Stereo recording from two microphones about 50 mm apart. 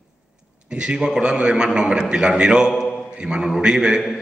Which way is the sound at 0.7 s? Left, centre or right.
Centre.